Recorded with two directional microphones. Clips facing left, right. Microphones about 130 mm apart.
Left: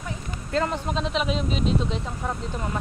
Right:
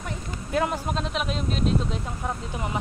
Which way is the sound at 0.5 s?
10° right (ahead or behind).